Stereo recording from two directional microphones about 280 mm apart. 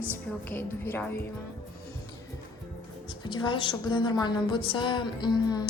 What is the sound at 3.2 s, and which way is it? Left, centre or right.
A woman's voice, centre.